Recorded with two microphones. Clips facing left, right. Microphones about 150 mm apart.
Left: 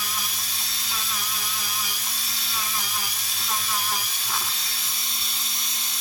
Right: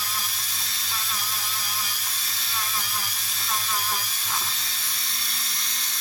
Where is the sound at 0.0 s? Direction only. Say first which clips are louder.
Even; 15° left (ahead or behind).